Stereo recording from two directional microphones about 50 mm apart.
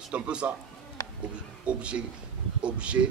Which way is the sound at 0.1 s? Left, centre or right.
Right.